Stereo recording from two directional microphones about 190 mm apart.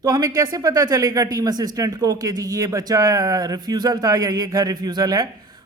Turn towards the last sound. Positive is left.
turn(degrees=-20)  # may be behind; listen again after turning